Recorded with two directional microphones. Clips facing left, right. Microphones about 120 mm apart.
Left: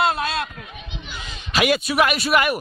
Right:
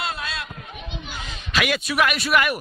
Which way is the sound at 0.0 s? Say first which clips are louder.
Left 9 dB; 60° left (ahead or behind).